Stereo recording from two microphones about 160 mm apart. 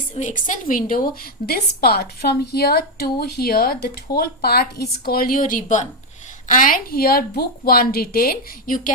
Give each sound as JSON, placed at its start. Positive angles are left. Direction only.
{"t": 0.2, "sound": "a woman's voice", "side_deg": 50}